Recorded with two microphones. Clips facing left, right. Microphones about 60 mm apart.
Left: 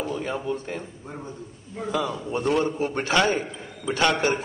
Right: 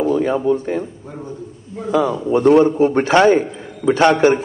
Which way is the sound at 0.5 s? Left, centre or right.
Right.